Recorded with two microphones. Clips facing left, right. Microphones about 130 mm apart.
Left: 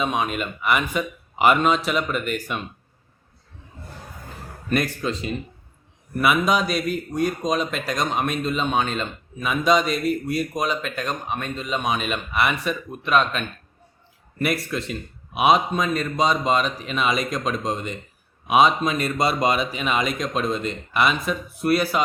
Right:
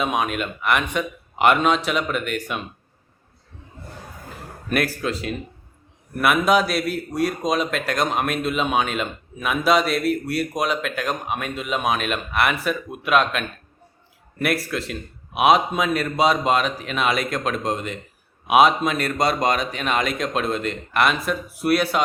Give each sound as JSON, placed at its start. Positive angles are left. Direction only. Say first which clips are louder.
{"t": 0.0, "sound": "a man's voice", "louder": "right 1 dB", "side_deg": -5}
{"t": 4.7, "sound": "a man's voice", "louder": "even", "side_deg": -5}